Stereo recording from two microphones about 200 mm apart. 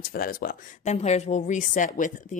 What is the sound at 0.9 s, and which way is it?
A woman's voice, 35° left (ahead or behind).